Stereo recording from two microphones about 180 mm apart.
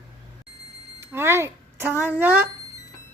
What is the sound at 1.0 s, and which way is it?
Speech, 15° right (ahead or behind).